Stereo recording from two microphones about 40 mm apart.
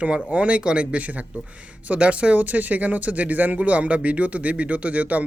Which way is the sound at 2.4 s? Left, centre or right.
Right.